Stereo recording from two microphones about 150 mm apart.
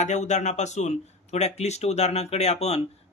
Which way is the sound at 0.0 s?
50° left (ahead or behind).